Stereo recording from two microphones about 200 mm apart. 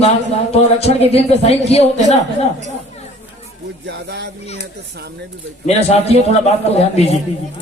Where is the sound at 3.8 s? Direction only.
60° right (ahead or behind).